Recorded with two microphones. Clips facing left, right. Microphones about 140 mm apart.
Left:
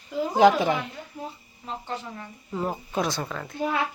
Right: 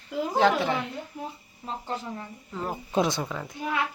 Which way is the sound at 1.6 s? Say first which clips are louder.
Even; 35° right (ahead or behind).